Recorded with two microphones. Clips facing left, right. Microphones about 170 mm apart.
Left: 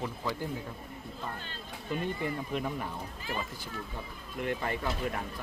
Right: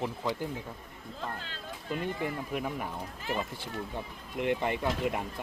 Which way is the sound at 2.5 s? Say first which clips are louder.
Even; 10° right (ahead or behind).